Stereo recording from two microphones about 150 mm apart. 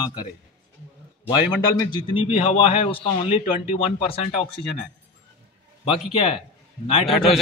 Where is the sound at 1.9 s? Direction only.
35° left (ahead or behind).